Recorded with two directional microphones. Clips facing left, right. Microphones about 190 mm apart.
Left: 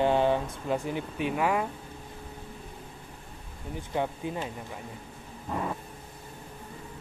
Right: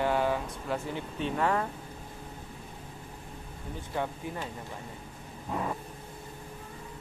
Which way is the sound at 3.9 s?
20° left (ahead or behind).